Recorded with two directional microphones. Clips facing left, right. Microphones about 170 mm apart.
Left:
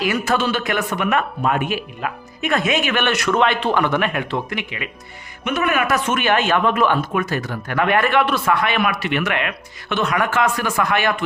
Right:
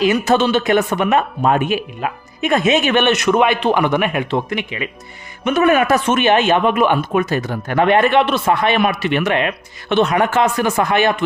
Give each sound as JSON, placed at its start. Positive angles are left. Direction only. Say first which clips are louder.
{"t": 0.0, "sound": "speech", "louder": "right 5 dB", "side_deg": -20}